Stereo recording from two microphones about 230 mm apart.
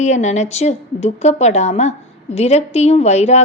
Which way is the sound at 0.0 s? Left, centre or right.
Left.